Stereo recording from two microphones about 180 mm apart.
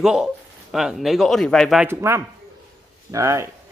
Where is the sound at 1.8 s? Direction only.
15° right (ahead or behind).